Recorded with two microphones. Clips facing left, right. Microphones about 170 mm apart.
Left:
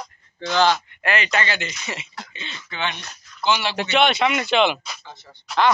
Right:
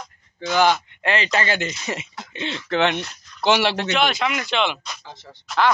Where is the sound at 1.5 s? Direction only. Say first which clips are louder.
Right 4 dB; 45° right (ahead or behind).